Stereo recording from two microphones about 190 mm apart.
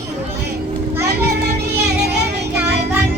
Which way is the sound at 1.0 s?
60° right (ahead or behind).